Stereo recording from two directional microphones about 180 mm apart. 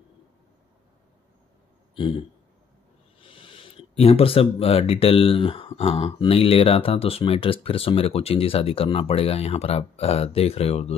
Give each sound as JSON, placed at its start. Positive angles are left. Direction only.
{"t": 2.0, "sound": "speech", "side_deg": 30}